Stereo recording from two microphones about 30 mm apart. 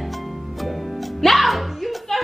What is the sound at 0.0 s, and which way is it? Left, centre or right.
Music, centre.